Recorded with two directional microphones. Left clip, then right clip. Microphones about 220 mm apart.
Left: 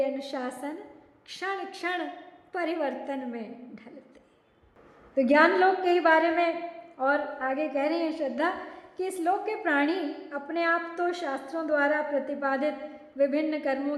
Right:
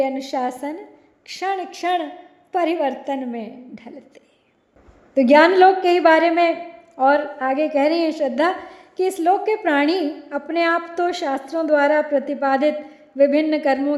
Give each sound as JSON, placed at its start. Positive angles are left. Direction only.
{"t": 0.0, "sound": "a woman's voice", "side_deg": -20}
{"t": 5.1, "sound": "a woman's voice", "side_deg": -35}